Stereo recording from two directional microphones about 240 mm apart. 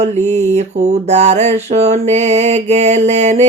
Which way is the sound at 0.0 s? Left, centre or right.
Right.